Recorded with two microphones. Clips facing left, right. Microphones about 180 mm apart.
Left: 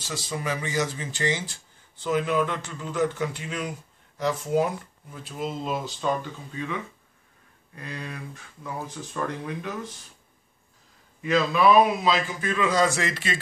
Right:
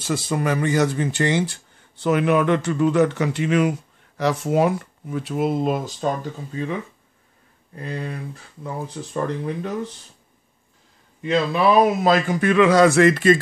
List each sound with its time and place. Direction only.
0.0 s speech: 55° right (ahead or behind); by 9.9 s 30° right (ahead or behind)
11.2 s speech: 30° right (ahead or behind)
12.0 s speech: 55° right (ahead or behind)